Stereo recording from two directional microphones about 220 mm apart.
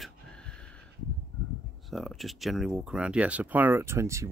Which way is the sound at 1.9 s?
Centre (ahead or behind).